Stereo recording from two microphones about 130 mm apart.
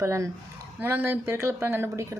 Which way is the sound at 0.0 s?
20° right (ahead or behind).